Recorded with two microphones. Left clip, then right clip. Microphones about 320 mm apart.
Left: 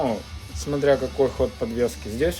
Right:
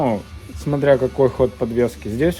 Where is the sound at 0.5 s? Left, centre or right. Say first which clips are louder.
Right 5 dB; centre.